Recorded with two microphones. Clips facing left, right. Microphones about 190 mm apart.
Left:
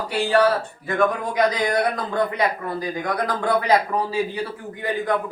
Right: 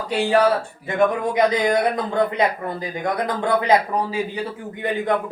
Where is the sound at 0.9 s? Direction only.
20° right (ahead or behind).